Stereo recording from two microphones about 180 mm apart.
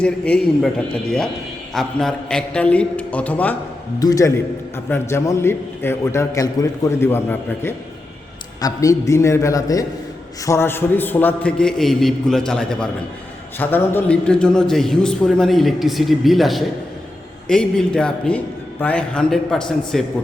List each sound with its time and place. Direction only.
0.0 s a man's voice: 5° left (ahead or behind)